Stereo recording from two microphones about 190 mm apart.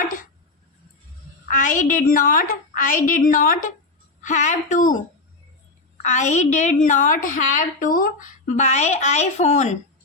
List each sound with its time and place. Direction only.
1.5 s a woman's voice: 40° left (ahead or behind)
6.0 s a woman's voice: 40° left (ahead or behind)